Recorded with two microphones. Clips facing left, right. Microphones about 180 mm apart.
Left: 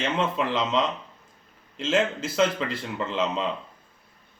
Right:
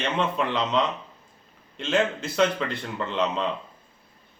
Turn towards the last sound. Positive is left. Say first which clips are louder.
# even
turn(degrees=5)  # may be behind; listen again after turning